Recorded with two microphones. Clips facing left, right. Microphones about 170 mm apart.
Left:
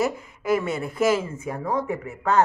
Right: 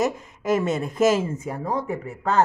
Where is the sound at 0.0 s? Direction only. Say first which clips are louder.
Right 1 dB; 20° right (ahead or behind).